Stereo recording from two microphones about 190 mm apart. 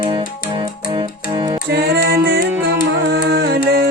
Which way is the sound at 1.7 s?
60° right (ahead or behind).